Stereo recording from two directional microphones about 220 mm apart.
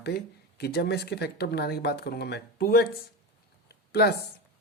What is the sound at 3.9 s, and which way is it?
Speech, 45° left (ahead or behind).